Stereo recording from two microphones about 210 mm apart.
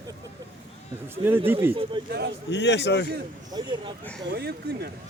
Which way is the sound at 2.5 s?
55° left (ahead or behind).